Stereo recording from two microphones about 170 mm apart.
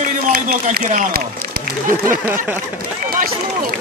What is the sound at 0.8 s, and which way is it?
Run, 50° right (ahead or behind).